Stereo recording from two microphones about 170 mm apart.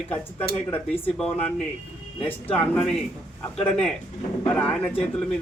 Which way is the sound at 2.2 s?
10° left (ahead or behind).